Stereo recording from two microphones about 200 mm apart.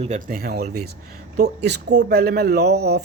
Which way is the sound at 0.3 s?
45° right (ahead or behind).